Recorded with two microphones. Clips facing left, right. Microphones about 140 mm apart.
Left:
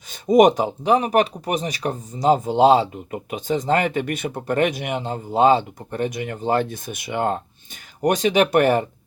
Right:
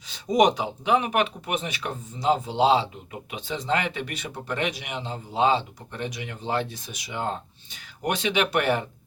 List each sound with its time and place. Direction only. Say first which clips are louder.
0.1 s speech: left 6 dB; 50° left (ahead or behind)
8.0 s speech: left 7 dB; 45° left (ahead or behind)